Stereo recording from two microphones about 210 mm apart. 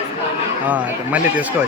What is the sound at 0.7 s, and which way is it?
Speech, 5° right (ahead or behind).